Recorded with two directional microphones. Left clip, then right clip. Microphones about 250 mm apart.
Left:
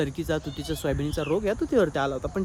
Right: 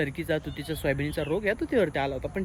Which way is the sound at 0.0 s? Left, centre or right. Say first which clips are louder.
Left 1 dB; centre.